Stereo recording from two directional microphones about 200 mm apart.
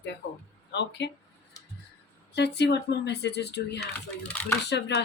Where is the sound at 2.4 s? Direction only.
55° left (ahead or behind).